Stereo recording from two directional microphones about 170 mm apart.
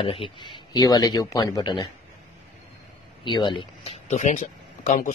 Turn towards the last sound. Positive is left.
turn(degrees=50)  # may be behind; listen again after turning